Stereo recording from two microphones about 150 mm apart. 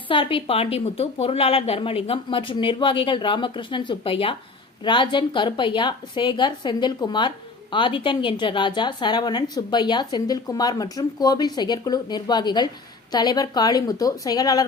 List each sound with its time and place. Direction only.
0.1 s a woman's voice: 35° left (ahead or behind)